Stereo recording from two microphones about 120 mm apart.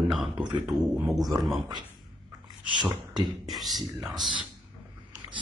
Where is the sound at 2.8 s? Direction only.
40° right (ahead or behind).